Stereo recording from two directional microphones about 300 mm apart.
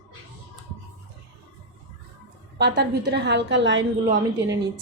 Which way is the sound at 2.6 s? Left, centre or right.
Right.